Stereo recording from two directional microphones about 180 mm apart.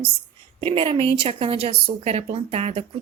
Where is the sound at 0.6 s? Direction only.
30° right (ahead or behind).